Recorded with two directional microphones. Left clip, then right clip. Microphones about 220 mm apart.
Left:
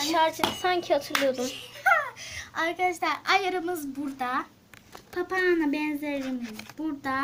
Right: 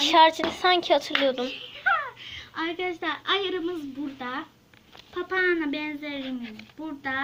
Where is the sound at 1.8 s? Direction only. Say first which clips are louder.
Left 2 dB; 55° left (ahead or behind).